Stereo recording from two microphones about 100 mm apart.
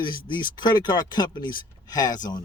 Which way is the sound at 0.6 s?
45° left (ahead or behind).